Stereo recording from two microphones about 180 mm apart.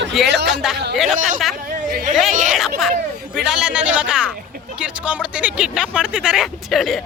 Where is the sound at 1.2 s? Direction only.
45° right (ahead or behind).